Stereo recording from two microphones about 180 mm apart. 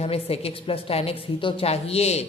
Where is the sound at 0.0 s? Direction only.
35° left (ahead or behind).